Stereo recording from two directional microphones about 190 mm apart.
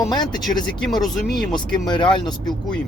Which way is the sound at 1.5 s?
25° left (ahead or behind).